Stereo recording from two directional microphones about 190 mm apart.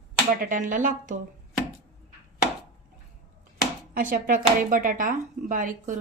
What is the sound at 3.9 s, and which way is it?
A woman's voice, 45° right (ahead or behind).